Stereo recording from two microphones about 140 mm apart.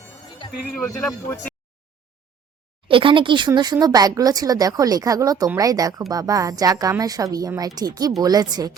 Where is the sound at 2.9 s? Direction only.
40° right (ahead or behind).